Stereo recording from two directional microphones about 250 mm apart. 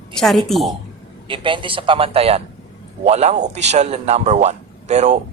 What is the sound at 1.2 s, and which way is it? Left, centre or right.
A man's voice, centre.